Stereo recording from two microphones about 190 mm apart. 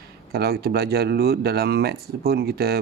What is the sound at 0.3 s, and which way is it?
Speech, 55° right (ahead or behind).